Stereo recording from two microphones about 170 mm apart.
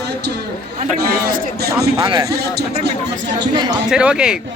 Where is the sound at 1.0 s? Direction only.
70° right (ahead or behind).